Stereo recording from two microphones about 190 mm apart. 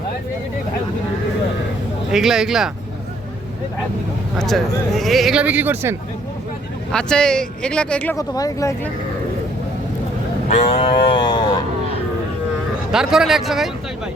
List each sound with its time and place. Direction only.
2.0 s speech: centre (ahead or behind)
4.4 s speech: centre (ahead or behind)
6.9 s speech: 5° left (ahead or behind)
8.1 s speech: 20° left (ahead or behind)
10.5 s speech: 30° left (ahead or behind)
12.9 s speech: centre (ahead or behind)